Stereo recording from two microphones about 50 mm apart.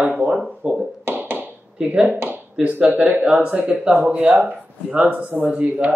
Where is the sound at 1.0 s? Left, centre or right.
Right.